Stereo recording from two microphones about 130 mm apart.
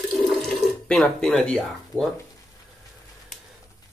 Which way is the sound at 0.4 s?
Centre (ahead or behind).